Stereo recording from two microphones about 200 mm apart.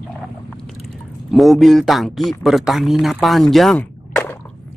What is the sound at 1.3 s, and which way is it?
Speech, centre (ahead or behind).